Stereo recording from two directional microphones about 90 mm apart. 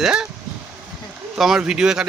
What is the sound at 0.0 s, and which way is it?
Speech, 5° right (ahead or behind).